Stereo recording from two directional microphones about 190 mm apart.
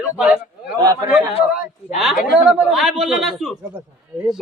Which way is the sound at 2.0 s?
Centre (ahead or behind).